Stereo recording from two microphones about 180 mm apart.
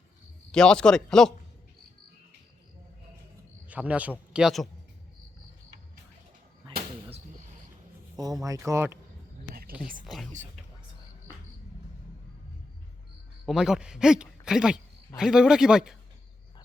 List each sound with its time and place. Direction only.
0.5 s a man's voice: 5° left (ahead or behind)
3.7 s a man's voice: 10° right (ahead or behind)
8.2 s speech: 20° right (ahead or behind)
13.4 s a man's voice: centre (ahead or behind)